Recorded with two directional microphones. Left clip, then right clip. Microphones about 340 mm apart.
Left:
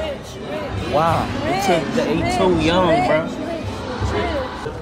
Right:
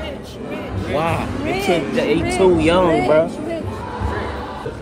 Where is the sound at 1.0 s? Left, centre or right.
Centre.